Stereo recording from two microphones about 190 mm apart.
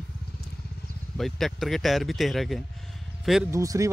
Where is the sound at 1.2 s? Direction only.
Centre (ahead or behind).